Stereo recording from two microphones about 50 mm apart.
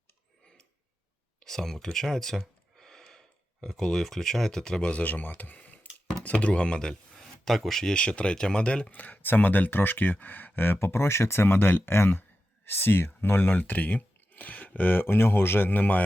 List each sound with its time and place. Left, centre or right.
1.5 s speech: centre
2.7 s a sound: centre
4.9 s speech: left
5.4 s tick-tock: left
6.2 s speech: left
7.4 s speech: centre
7.9 s speech: left
8.9 s speech: left
15.7 s speech: left